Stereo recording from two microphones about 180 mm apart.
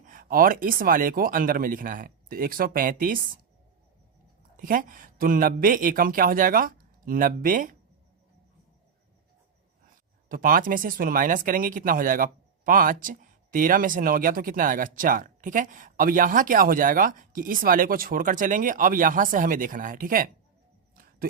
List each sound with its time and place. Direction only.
0.1 s speech: 50° right (ahead or behind)
4.5 s speech: 50° right (ahead or behind)
10.2 s speech: 50° right (ahead or behind)
20.9 s a sound: 55° right (ahead or behind)